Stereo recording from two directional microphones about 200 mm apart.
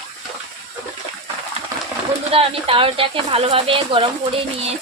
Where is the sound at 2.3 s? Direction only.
30° right (ahead or behind).